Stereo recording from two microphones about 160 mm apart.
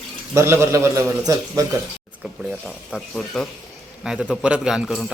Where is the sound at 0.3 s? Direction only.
15° right (ahead or behind).